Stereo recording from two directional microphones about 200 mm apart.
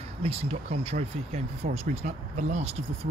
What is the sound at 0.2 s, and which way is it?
Speech, 30° right (ahead or behind).